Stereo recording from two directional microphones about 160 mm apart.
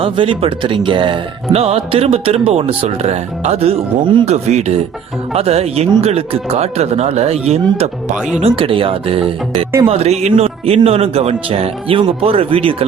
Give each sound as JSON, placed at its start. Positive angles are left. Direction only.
{"t": 0.0, "sound": "a man's voice", "side_deg": -35}
{"t": 8.1, "sound": "speech", "side_deg": -5}
{"t": 8.4, "sound": "speech", "side_deg": -35}